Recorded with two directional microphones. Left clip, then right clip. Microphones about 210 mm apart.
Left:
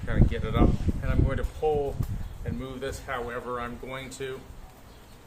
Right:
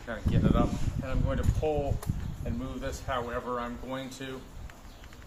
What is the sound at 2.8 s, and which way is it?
Speech, 45° left (ahead or behind).